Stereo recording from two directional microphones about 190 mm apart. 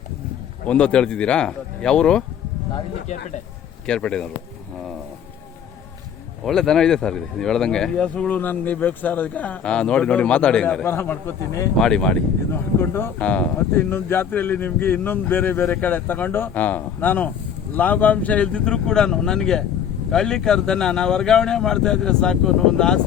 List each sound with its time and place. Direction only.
0.7 s speech: 5° left (ahead or behind)
3.1 s speech: 35° left (ahead or behind)
3.8 s speech: 5° left (ahead or behind)
6.4 s speech: centre (ahead or behind)
11.8 s speech: 5° left (ahead or behind)